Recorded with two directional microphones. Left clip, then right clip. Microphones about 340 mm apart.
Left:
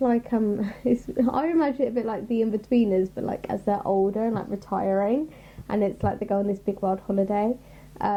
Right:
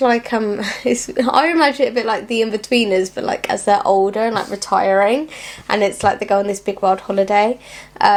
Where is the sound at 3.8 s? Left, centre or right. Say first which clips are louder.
Right 6 dB; centre.